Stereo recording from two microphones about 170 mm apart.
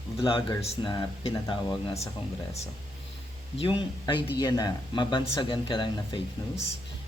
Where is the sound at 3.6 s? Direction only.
25° left (ahead or behind).